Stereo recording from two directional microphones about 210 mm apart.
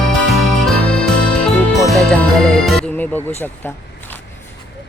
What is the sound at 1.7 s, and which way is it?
Speech, 5° left (ahead or behind).